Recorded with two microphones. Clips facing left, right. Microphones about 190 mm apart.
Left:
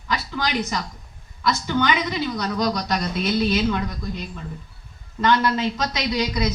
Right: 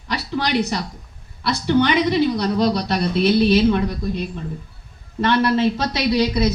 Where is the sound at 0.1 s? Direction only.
35° right (ahead or behind).